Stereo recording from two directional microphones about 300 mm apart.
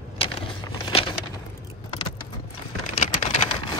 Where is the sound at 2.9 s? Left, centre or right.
Left.